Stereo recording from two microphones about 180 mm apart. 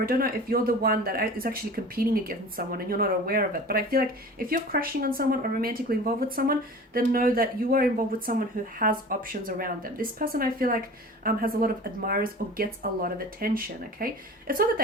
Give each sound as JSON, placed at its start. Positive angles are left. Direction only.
{"t": 0.0, "sound": "speech", "side_deg": -55}